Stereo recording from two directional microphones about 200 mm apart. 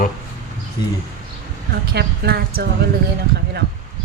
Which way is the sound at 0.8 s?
20° left (ahead or behind).